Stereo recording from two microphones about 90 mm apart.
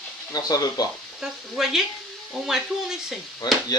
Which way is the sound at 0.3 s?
45° left (ahead or behind).